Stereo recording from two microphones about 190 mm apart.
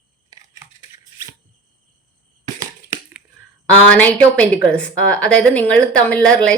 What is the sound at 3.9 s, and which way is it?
Speech, 5° left (ahead or behind).